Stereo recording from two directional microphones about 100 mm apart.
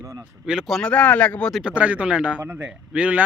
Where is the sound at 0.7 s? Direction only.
10° left (ahead or behind).